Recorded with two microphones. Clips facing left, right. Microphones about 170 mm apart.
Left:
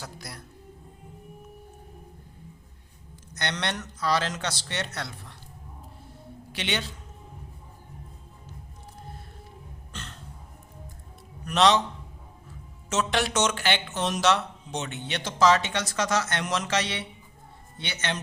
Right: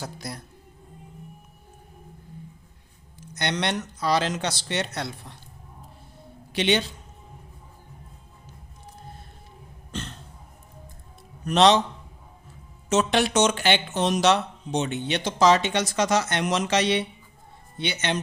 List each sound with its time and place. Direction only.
0.0 s a man's voice: 20° right (ahead or behind)
3.3 s speech: 15° right (ahead or behind)
6.5 s speech: 20° right (ahead or behind)
9.9 s cough: 20° right (ahead or behind)
11.4 s a man's voice: 25° right (ahead or behind)
12.9 s speech: 20° right (ahead or behind)